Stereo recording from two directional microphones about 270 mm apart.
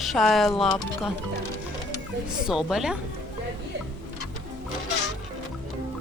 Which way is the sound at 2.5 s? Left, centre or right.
Centre.